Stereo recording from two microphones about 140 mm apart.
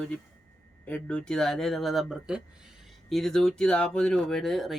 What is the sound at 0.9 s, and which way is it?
Speech, 10° left (ahead or behind).